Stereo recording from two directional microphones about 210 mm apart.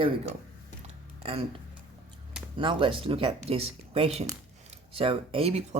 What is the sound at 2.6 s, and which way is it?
Speech, 25° right (ahead or behind).